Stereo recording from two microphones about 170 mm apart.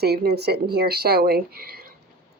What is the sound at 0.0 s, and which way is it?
Speech, 70° right (ahead or behind).